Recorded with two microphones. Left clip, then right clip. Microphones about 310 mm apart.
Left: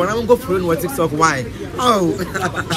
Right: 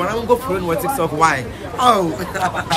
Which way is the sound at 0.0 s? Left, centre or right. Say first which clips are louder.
Left 2 dB; centre.